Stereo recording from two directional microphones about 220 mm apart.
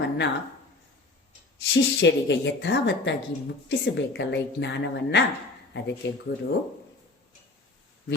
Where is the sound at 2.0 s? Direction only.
55° left (ahead or behind).